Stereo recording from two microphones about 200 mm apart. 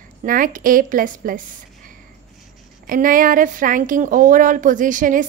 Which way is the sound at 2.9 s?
45° right (ahead or behind).